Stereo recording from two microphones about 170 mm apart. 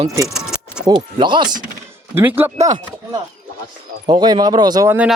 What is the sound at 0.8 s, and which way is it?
Speech, 25° right (ahead or behind).